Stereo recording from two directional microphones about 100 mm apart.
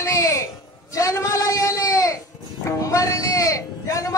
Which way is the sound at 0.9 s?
35° left (ahead or behind).